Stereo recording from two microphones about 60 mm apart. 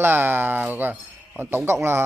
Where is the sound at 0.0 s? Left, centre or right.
Right.